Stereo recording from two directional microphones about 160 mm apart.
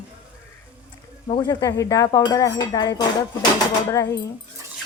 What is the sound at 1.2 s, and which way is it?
Speech, 30° left (ahead or behind).